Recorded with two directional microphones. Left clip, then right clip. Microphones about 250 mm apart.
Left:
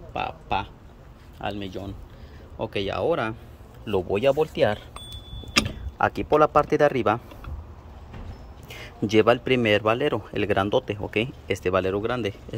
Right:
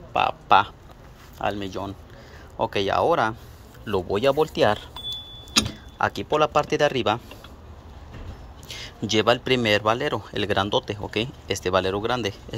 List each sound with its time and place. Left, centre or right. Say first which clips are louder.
0.1 s speech: right 9 dB; centre
5.1 s a sound: even; centre
8.6 s speech: right 1 dB; centre